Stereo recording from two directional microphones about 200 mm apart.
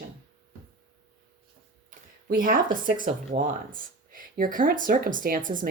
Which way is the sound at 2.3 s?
45° right (ahead or behind).